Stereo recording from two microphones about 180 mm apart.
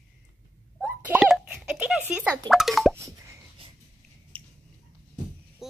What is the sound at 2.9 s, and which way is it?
Plop, 15° right (ahead or behind).